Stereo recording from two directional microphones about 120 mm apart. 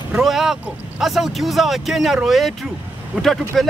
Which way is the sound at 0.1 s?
Centre (ahead or behind).